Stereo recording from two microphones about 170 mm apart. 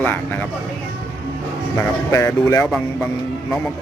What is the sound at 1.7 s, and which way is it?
Speech, 20° left (ahead or behind).